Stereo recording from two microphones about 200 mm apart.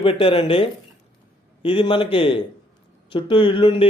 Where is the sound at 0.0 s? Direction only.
25° left (ahead or behind).